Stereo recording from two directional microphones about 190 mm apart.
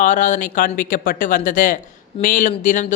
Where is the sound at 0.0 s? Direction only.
40° left (ahead or behind).